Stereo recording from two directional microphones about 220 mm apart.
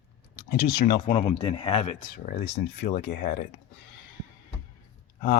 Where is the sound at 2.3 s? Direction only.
50° left (ahead or behind).